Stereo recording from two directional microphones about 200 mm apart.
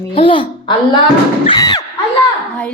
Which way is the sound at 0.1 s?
25° left (ahead or behind).